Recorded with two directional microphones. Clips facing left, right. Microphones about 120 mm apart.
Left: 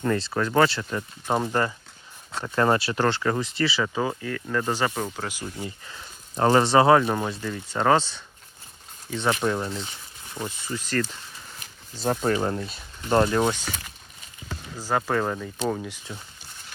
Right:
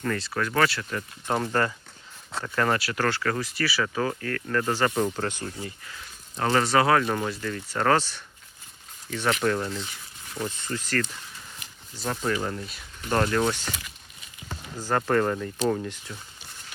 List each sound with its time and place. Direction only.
0.0 s speech: 25° left (ahead or behind)
4.9 s speech: centre (ahead or behind)
5.5 s speech: 25° left (ahead or behind)
10.3 s speech: 10° left (ahead or behind)
12.0 s speech: 30° left (ahead or behind)
14.8 s speech: 5° left (ahead or behind)